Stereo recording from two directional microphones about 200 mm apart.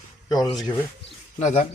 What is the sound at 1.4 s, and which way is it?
Speech, 35° left (ahead or behind).